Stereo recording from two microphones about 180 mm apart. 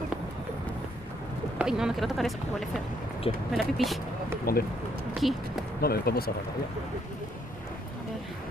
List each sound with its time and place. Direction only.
1.6 s speech: 5° right (ahead or behind)
4.5 s speech: 55° left (ahead or behind)
5.2 s speech: centre (ahead or behind)
5.8 s speech: 60° left (ahead or behind)